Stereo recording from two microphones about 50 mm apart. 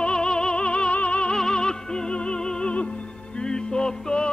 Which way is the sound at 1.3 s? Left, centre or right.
Centre.